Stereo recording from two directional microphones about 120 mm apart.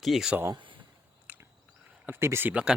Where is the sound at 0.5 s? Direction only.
45° right (ahead or behind).